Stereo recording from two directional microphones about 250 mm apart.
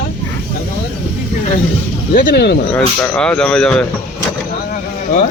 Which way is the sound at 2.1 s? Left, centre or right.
Left.